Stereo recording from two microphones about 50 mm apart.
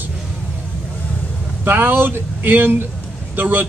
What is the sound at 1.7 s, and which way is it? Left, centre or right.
A man's voice, right.